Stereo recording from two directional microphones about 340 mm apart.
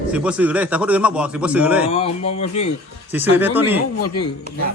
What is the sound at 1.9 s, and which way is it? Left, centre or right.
Speech, centre.